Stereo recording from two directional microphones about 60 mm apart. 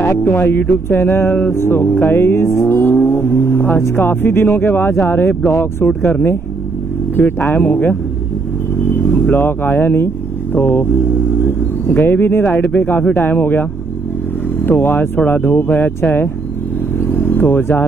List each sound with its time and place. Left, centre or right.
0.0 s speech: left
7.2 s speech: left
17.1 s vehicle: left